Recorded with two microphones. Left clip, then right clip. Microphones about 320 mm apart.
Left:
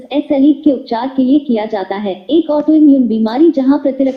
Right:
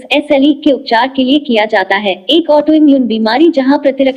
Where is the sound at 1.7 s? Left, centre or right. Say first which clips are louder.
Right 7 dB; right.